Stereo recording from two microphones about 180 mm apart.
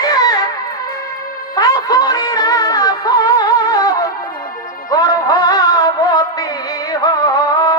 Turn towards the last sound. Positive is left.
turn(degrees=20)  # may be behind; listen again after turning